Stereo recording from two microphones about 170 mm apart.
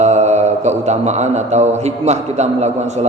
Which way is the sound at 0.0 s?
40° right (ahead or behind).